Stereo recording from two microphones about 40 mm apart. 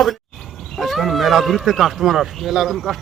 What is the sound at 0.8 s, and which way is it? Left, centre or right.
Speech, centre.